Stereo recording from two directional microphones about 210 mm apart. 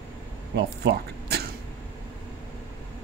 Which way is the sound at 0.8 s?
50° right (ahead or behind).